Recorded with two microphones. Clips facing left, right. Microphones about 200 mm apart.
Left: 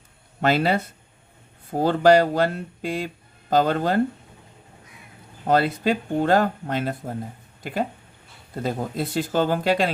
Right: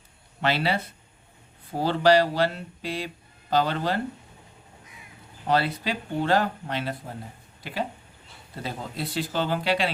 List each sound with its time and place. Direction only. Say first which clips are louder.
0.4 s speech: left 5 dB; 45° left (ahead or behind)
5.5 s speech: left 5 dB; 50° left (ahead or behind)